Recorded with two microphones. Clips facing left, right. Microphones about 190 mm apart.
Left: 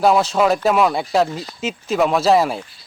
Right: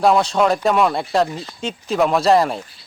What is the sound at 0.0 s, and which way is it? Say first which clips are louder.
A man's voice: even; centre (ahead or behind).